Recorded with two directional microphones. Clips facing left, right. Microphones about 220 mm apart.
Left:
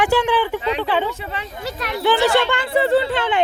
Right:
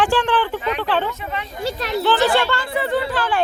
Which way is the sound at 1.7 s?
30° right (ahead or behind).